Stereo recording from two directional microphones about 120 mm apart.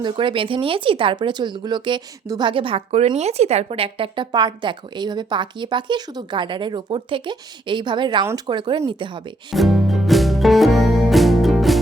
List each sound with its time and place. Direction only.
0.0 s speech: 45° right (ahead or behind)
9.5 s music: centre (ahead or behind)